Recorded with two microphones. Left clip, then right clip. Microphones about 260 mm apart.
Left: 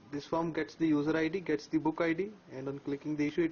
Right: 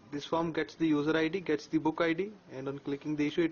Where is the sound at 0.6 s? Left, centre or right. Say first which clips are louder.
Right 1 dB; centre.